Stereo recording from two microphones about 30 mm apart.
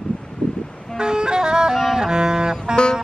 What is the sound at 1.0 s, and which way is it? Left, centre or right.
Music, right.